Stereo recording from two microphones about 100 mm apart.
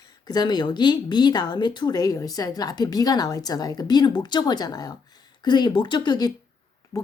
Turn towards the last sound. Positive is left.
turn(degrees=45)  # may be behind; listen again after turning